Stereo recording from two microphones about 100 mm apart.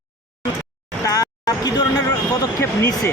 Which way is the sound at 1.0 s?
40° left (ahead or behind).